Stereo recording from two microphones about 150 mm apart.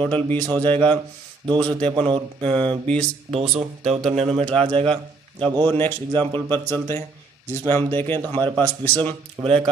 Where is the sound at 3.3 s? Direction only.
45° right (ahead or behind).